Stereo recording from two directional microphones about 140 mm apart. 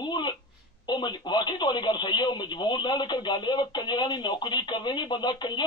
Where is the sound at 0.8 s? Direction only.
30° left (ahead or behind).